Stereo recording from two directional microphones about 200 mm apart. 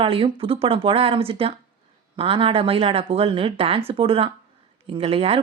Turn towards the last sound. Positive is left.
turn(degrees=-30)  # may be behind; listen again after turning